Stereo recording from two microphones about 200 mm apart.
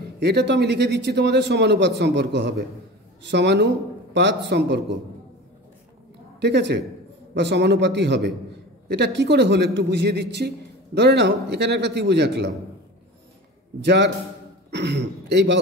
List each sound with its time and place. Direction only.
0.2 s speech: 55° right (ahead or behind)
6.4 s speech: 60° right (ahead or behind)
13.7 s speech: 60° right (ahead or behind)